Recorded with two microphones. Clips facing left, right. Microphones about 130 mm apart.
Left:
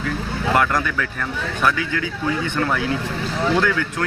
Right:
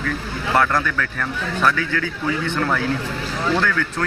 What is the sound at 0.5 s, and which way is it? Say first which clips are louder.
Speech: right 1 dB; 15° left (ahead or behind).